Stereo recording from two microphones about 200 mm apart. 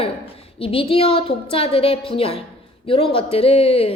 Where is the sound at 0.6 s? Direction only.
25° left (ahead or behind).